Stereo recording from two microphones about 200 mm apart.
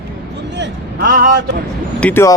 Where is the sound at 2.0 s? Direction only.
10° left (ahead or behind).